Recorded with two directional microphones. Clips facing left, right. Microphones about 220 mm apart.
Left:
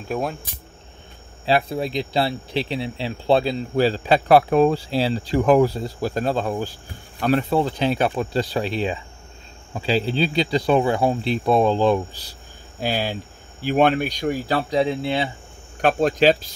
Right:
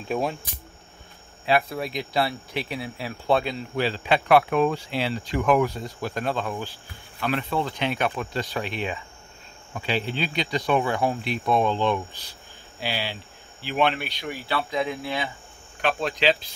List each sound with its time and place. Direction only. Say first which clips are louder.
0.1 s speech: left 1 dB; centre (ahead or behind)
1.4 s speech: left 3 dB; 30° left (ahead or behind)
7.2 s speech: left 7 dB; 40° left (ahead or behind)
12.8 s speech: left 6 dB; 45° left (ahead or behind); by 15.3 s 30° left (ahead or behind)
15.8 s speech: left 7 dB; 45° left (ahead or behind)